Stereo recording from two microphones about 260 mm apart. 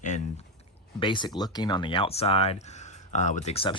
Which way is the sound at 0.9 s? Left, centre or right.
Centre.